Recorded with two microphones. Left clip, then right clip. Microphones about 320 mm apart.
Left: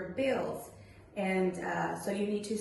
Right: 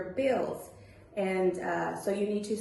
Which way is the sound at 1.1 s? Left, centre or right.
Centre.